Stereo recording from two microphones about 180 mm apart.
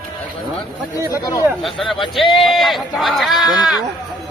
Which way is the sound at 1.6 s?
Centre (ahead or behind).